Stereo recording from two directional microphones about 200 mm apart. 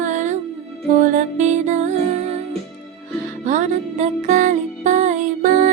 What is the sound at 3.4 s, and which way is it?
Music, 40° right (ahead or behind).